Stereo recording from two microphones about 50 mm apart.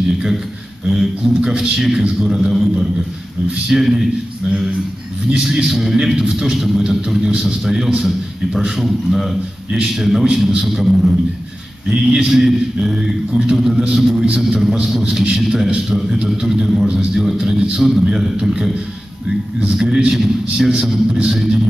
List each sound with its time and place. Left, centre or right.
0.1 s a man's voice: centre
5.4 s a man's voice: centre
6.5 s a man's voice: centre
19.7 s a man's voice: centre